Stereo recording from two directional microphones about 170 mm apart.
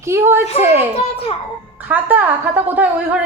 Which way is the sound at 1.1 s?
35° left (ahead or behind).